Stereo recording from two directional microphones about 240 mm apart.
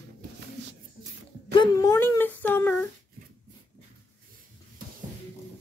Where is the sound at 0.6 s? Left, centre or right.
Right.